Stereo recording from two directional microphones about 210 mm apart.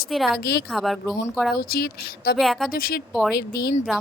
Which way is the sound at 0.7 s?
Centre (ahead or behind).